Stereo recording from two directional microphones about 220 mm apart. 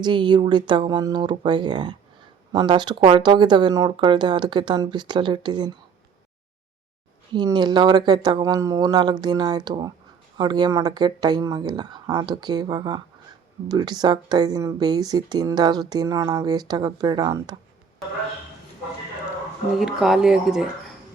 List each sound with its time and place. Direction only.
0.0 s speech: 20° right (ahead or behind)
7.3 s speech: 20° right (ahead or behind)
19.8 s speech: centre (ahead or behind)